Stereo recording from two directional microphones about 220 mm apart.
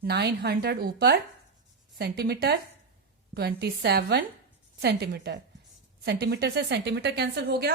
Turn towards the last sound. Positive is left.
turn(degrees=-45)  # may be behind; listen again after turning